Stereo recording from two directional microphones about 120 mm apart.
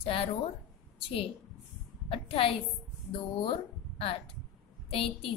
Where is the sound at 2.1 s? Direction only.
50° left (ahead or behind).